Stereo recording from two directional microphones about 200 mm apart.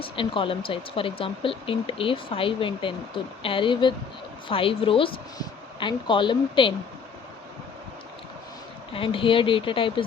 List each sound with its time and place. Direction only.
0.0 s speech: 25° left (ahead or behind)
8.9 s speech: 25° left (ahead or behind)